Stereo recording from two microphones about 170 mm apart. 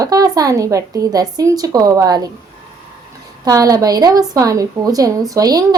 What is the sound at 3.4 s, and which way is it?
Speech, 20° right (ahead or behind).